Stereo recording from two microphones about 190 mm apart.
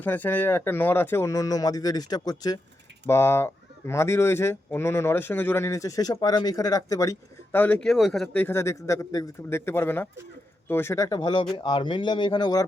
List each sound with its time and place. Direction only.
0.0 s speech: 10° left (ahead or behind)